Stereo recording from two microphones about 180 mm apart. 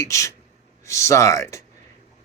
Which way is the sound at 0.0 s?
15° left (ahead or behind).